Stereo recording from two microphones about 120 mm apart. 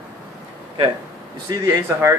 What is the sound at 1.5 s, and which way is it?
Speech, 25° right (ahead or behind).